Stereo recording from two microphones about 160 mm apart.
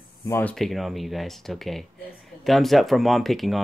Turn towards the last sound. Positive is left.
turn(degrees=0)  # may be behind; listen again after turning